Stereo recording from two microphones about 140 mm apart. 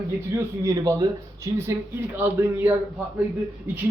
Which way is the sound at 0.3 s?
20° right (ahead or behind).